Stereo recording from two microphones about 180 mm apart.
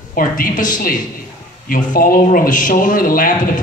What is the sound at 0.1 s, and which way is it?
Speech, 50° left (ahead or behind).